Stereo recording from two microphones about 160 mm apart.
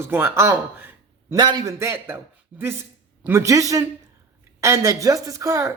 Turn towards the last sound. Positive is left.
turn(degrees=-20)  # may be behind; listen again after turning